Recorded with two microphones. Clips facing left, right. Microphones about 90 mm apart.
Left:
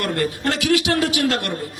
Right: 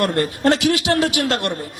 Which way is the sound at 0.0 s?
25° right (ahead or behind).